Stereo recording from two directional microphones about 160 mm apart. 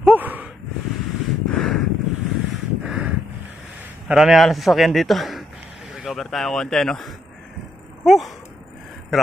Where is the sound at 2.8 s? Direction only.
5° right (ahead or behind).